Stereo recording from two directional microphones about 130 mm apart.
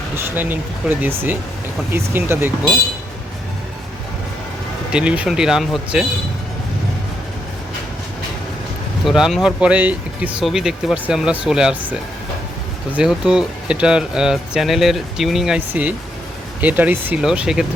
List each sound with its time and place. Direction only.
0.2 s speech: 15° right (ahead or behind)
4.9 s speech: 10° right (ahead or behind)
9.0 s speech: 5° right (ahead or behind)